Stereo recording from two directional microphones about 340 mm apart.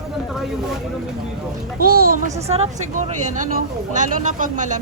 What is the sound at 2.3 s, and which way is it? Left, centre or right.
A woman's voice, centre.